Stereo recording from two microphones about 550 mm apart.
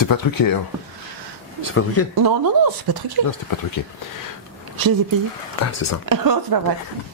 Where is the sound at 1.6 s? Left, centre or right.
Left.